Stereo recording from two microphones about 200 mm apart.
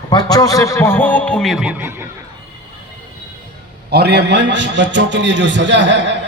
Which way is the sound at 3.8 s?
55° right (ahead or behind).